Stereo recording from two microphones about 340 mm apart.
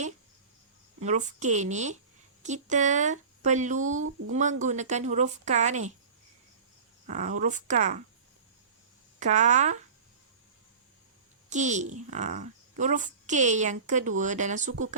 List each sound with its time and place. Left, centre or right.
1.0 s a woman's voice: right
7.1 s a woman's voice: right
9.1 s a woman's voice: right
11.4 s a child's voice: right